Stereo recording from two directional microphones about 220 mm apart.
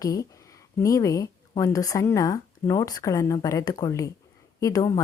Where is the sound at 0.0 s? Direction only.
15° left (ahead or behind).